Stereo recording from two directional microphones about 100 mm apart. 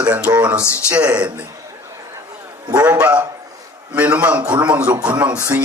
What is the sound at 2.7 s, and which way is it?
A man's voice, 15° right (ahead or behind).